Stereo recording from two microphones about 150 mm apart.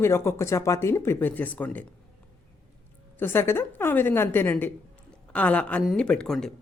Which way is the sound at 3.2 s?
15° left (ahead or behind).